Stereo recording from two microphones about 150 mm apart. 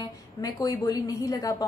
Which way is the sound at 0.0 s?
25° left (ahead or behind).